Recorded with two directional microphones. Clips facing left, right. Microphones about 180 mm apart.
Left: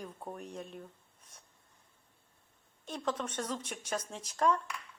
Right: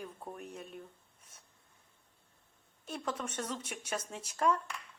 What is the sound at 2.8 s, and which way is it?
Speech, 10° right (ahead or behind).